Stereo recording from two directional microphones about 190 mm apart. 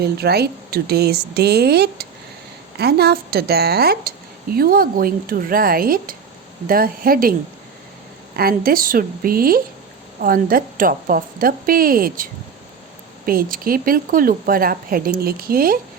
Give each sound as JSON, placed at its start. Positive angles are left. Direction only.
{"t": 0.0, "sound": "speech", "side_deg": -55}
{"t": 8.4, "sound": "speech", "side_deg": -50}